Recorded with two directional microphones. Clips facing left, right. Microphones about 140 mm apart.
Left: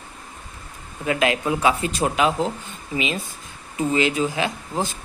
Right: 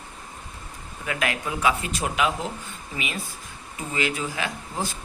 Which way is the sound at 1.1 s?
25° left (ahead or behind).